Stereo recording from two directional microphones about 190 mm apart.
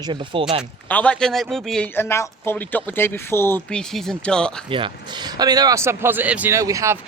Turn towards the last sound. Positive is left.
turn(degrees=-15)  # may be behind; listen again after turning